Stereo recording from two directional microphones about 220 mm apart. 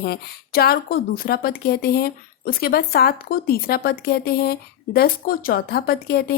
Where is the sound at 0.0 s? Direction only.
45° left (ahead or behind).